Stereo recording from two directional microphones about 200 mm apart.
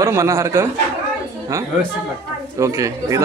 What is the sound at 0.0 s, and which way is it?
Speech, 15° right (ahead or behind).